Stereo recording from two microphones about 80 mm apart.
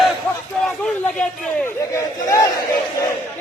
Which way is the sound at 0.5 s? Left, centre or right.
Centre.